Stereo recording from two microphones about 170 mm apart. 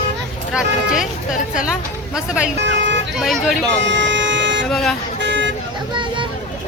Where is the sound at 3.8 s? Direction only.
90° right.